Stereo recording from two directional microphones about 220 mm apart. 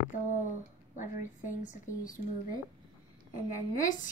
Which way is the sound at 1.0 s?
35° left (ahead or behind).